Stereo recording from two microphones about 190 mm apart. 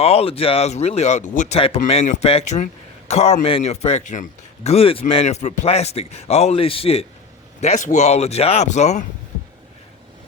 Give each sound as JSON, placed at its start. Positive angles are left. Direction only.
{"t": 0.0, "sound": "a man's voice", "side_deg": 30}